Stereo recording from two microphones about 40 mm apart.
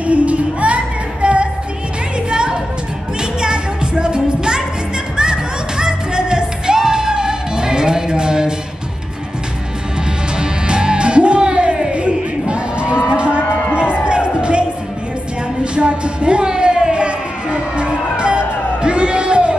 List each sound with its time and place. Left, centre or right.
0.0 s music: right; by 8.5 s centre
10.4 s music: right
15.6 s a sound: right